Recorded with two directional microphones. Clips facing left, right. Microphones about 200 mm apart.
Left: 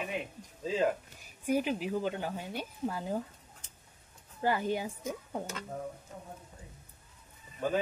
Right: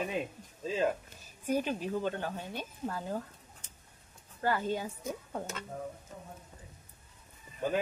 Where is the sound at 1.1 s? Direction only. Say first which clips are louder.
Left 1 dB; 15° left (ahead or behind).